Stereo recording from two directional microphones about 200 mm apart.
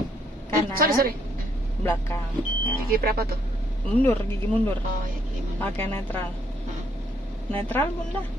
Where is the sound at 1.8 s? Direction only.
10° left (ahead or behind).